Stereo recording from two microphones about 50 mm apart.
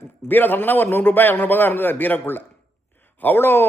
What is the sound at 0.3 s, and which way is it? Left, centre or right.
A man's voice, left.